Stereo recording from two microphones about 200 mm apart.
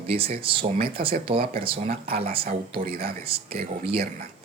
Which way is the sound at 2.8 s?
50° right (ahead or behind).